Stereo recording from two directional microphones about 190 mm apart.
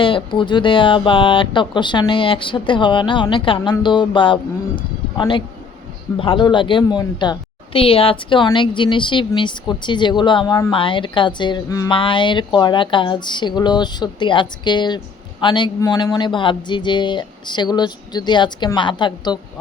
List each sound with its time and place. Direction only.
0.0 s a woman's voice: 25° left (ahead or behind)